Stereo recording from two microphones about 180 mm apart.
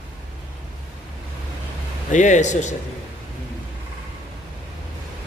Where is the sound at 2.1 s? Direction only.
45° left (ahead or behind).